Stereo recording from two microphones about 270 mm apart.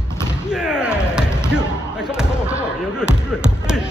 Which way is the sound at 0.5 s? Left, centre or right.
Centre.